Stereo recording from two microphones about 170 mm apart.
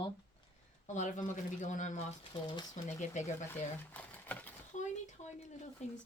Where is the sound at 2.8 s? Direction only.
45° left (ahead or behind).